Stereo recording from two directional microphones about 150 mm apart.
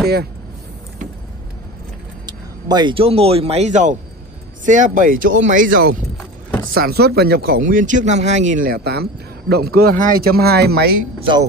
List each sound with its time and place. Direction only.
2.2 s speech: 30° right (ahead or behind); by 5.9 s 70° right (ahead or behind)
6.7 s speech: 90° right
11.1 s a man's voice: 35° right (ahead or behind)